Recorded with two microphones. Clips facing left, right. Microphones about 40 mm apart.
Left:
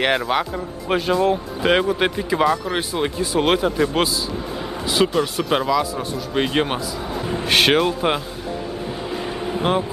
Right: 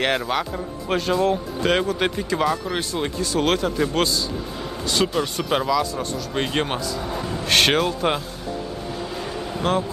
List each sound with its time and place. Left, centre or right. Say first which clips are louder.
0.0 s speech: left 3 dB; centre
9.1 s air conditioning: left 4 dB; centre